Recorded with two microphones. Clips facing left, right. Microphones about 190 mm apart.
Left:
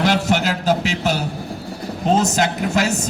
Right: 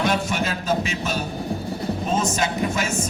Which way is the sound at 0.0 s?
75° left (ahead or behind).